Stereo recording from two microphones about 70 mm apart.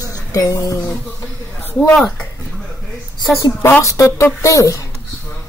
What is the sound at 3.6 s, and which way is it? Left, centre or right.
Speech, left.